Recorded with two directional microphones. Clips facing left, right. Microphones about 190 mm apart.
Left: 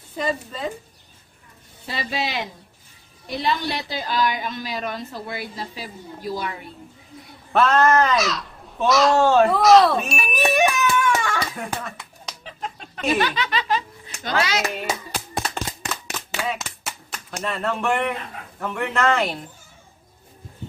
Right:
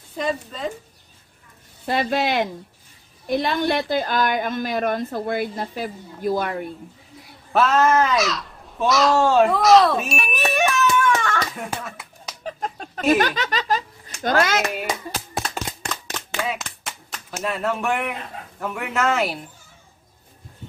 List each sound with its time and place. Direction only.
0.1 s speech: centre (ahead or behind)
1.9 s a woman's voice: 55° right (ahead or behind)
7.5 s speech: 5° right (ahead or behind)
10.4 s a sound: 15° left (ahead or behind)
11.5 s a sound: centre (ahead or behind)
12.4 s snicker: 45° right (ahead or behind)
14.2 s a woman's voice: 50° right (ahead or behind)
14.7 s speech: 5° right (ahead or behind)
15.1 s clapping: centre (ahead or behind)
16.4 s a sound: 5° left (ahead or behind)
17.4 s speech: 5° right (ahead or behind)